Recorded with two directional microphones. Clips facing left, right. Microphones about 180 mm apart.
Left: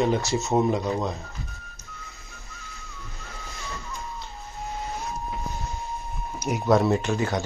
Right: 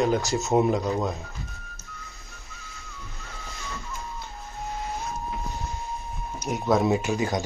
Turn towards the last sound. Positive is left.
turn(degrees=-15)  # may be behind; listen again after turning